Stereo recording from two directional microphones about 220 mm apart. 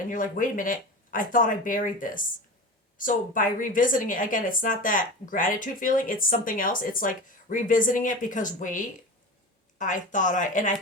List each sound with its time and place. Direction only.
0.1 s a woman's voice: 35° left (ahead or behind)